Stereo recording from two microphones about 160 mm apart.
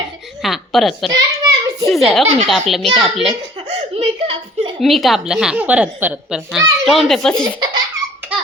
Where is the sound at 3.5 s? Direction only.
35° right (ahead or behind).